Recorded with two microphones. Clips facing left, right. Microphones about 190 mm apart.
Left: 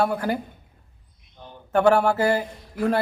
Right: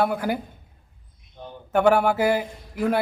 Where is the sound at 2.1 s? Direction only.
15° right (ahead or behind).